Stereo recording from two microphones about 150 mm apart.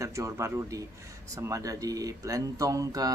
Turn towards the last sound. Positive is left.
turn(degrees=-25)  # may be behind; listen again after turning